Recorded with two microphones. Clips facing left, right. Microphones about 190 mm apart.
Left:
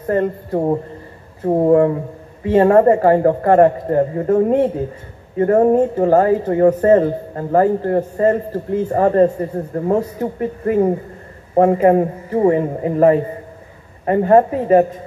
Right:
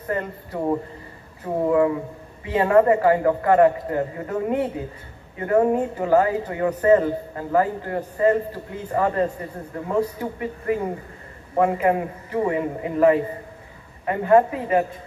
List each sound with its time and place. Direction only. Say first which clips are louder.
0.0 s speech: left 9 dB; 40° left (ahead or behind)